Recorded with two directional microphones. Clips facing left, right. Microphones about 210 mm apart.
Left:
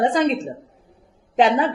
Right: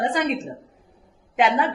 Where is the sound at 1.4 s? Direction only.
35° left (ahead or behind).